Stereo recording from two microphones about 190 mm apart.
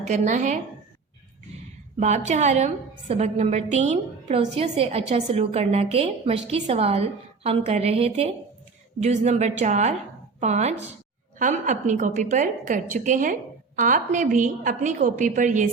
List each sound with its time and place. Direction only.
0.0 s a woman's voice: 40° right (ahead or behind)
2.0 s a woman's voice: 40° right (ahead or behind)